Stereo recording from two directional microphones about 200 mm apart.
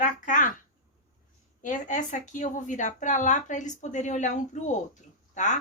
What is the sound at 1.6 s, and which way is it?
Speech, 40° left (ahead or behind).